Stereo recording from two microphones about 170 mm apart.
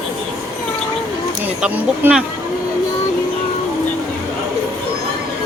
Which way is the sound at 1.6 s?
10° right (ahead or behind).